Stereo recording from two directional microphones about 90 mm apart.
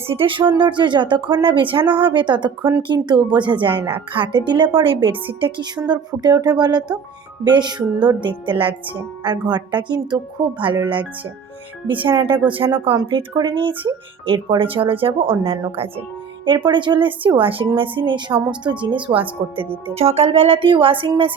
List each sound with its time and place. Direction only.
0.1 s a woman's voice: 80° right; by 10.5 s 55° right (ahead or behind)
11.9 s speech: 65° right (ahead or behind)
13.3 s a woman's voice: 55° right (ahead or behind); by 15.5 s 80° right
16.5 s a woman's voice: 65° right (ahead or behind)
20.1 s speech: 90° right; by 21.1 s 75° right (ahead or behind)